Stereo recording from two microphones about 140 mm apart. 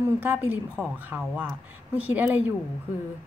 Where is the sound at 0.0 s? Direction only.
15° right (ahead or behind).